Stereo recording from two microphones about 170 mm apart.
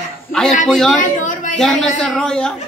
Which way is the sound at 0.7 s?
5° left (ahead or behind).